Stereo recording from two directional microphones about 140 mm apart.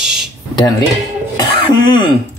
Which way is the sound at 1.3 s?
30° left (ahead or behind).